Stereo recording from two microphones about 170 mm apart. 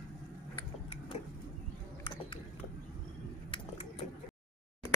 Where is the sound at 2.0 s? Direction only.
25° left (ahead or behind).